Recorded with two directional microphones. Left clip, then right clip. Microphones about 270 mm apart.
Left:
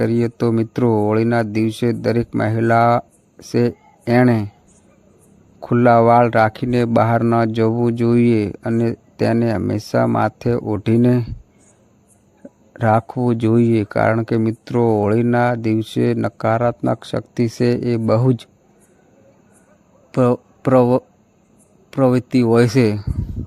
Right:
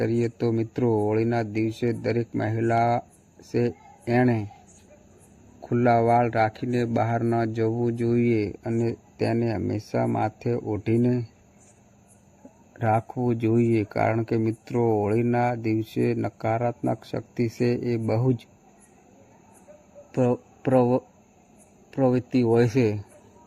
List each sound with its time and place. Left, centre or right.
0.0 s speech: left
5.6 s speech: left
12.7 s speech: left
20.1 s speech: left